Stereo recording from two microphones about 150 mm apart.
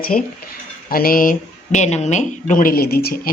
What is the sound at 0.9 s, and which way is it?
Speech, 80° left.